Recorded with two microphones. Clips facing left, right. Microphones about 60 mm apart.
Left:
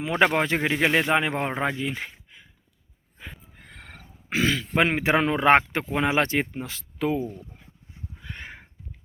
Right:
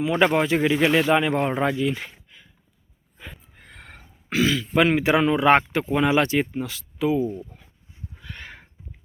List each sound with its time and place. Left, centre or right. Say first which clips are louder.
0.0 s speech: right 2 dB; left
1.0 s speech: right 3 dB; left
3.7 s wild animals: right 1 dB; centre
4.3 s speech: right 2 dB; left
8.2 s horse: even; left